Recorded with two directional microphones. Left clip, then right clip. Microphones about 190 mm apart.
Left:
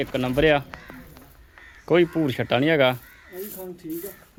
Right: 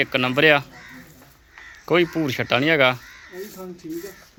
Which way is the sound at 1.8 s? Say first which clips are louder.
Even; 10° left (ahead or behind).